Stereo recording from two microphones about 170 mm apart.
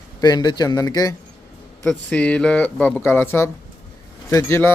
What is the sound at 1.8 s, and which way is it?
Speech, 5° left (ahead or behind).